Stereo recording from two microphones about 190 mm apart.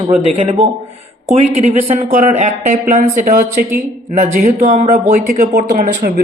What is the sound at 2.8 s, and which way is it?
Speech, 45° right (ahead or behind).